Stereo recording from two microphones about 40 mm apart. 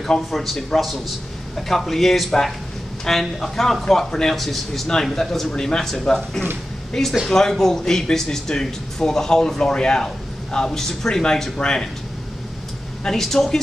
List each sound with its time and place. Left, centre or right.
0.0 s speech: centre
13.0 s speech: centre